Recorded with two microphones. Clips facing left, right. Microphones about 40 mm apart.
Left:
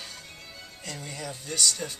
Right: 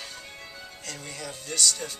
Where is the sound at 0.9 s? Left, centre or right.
Centre.